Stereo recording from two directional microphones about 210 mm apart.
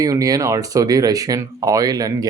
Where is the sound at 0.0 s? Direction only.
15° right (ahead or behind).